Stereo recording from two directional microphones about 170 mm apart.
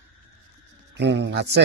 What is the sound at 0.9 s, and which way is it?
Speech, 90° right.